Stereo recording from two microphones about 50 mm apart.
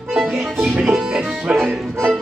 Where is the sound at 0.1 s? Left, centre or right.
Centre.